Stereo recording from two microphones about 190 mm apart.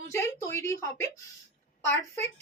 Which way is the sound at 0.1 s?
15° left (ahead or behind).